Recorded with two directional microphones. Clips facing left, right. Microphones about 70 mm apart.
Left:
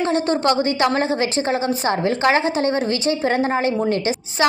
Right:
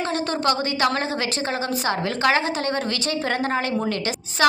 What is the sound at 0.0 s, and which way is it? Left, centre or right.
A woman's voice, left.